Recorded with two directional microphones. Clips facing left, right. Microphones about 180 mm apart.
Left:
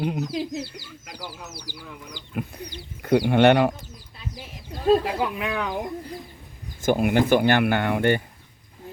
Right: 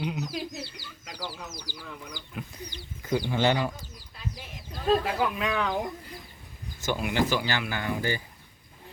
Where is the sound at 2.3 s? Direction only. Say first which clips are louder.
Left 10 dB; 60° left (ahead or behind).